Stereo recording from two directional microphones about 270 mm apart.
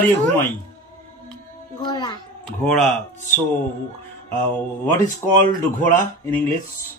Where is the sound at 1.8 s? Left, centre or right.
Centre.